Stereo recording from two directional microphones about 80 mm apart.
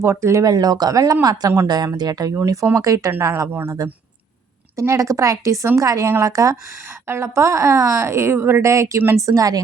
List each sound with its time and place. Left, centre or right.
0.0 s a woman's voice: right
0.5 s speech: right
2.6 s speech: right
3.1 s a woman's voice: right
4.8 s a woman's voice: right